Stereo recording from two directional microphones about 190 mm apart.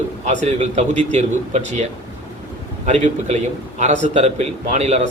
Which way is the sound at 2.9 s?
40° right (ahead or behind).